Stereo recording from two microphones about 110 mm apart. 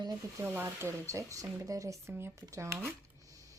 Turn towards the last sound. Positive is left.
turn(degrees=-30)  # may be behind; listen again after turning